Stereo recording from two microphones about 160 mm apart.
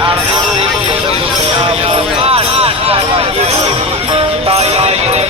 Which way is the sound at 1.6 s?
35° right (ahead or behind).